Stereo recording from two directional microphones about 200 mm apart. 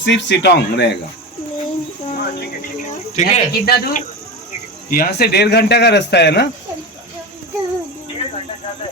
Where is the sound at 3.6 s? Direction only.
50° left (ahead or behind).